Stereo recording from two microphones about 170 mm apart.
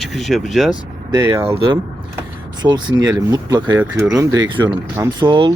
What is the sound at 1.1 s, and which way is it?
Speech, 20° right (ahead or behind).